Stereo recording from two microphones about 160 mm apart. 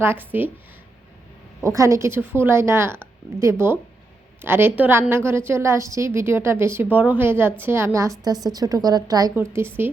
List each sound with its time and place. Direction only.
0.0 s a woman's voice: 15° right (ahead or behind)
1.6 s a woman's voice: 20° right (ahead or behind)